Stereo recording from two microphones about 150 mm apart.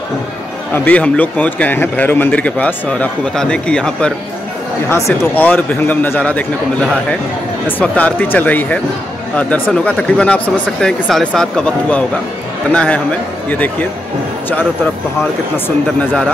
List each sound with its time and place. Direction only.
0.7 s a man's voice: 10° left (ahead or behind)
4.8 s a man's voice: 20° left (ahead or behind)
15.5 s a man's voice: 10° left (ahead or behind)